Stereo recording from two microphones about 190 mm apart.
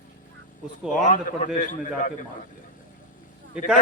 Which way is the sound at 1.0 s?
40° left (ahead or behind).